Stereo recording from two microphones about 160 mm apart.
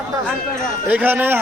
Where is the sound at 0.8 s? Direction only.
10° right (ahead or behind).